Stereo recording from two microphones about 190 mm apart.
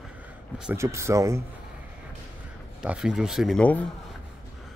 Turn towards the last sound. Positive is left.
turn(degrees=5)  # may be behind; listen again after turning